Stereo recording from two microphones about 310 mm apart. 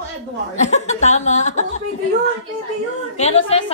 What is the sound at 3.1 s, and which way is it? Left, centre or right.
Speech, left.